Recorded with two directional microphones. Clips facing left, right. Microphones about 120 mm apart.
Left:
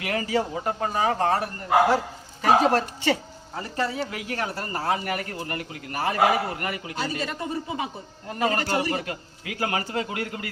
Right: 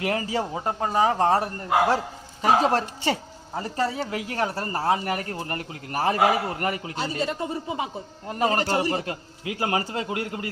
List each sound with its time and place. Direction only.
0.0 s a man's voice: 30° right (ahead or behind)